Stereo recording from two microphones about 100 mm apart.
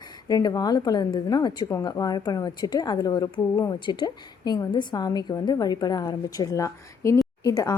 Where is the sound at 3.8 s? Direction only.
50° left (ahead or behind).